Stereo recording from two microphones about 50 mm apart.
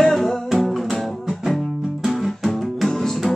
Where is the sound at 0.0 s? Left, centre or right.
Centre.